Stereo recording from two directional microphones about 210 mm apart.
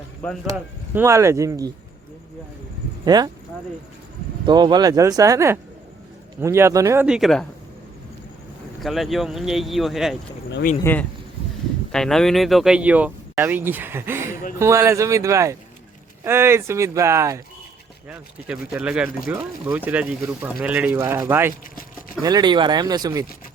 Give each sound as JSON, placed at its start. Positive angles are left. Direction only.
{"t": 0.4, "sound": "speech", "side_deg": -10}
{"t": 3.0, "sound": "speech", "side_deg": -20}
{"t": 4.4, "sound": "speech", "side_deg": -20}
{"t": 8.8, "sound": "speech", "side_deg": 0}
{"t": 10.5, "sound": "speech", "side_deg": 45}
{"t": 11.9, "sound": "speech", "side_deg": 0}